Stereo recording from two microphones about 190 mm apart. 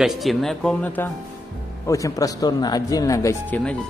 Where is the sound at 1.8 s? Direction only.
15° left (ahead or behind).